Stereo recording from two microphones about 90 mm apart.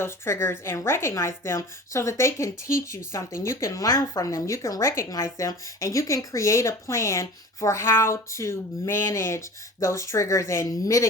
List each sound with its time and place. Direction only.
0.0 s a woman's voice: 25° left (ahead or behind)